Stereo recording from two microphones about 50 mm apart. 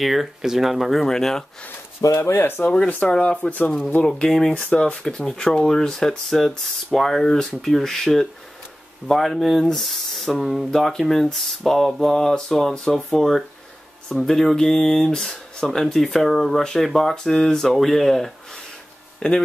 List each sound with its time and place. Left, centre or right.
0.0 s speech: centre
1.0 s speech: centre
2.0 s speech: left
2.3 s speech: left
2.6 s speech: centre
4.2 s speech: centre
19.1 s a sound: centre